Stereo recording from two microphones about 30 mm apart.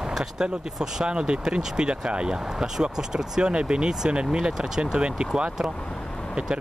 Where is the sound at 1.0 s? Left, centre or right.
Right.